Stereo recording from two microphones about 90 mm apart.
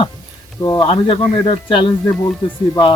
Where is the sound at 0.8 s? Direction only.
65° left (ahead or behind).